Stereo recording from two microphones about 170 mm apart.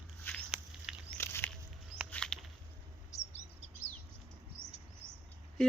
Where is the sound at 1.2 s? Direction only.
15° left (ahead or behind).